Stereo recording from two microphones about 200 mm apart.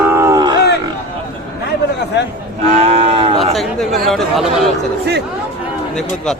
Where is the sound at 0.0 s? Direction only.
10° right (ahead or behind).